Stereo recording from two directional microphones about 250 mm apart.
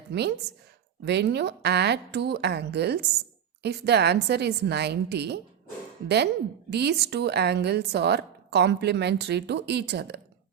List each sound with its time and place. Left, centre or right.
0.1 s a woman's voice: right
6.7 s speech: right